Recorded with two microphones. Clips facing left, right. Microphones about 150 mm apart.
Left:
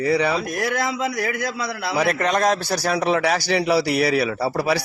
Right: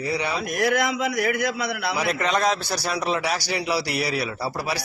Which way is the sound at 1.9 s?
55° left (ahead or behind).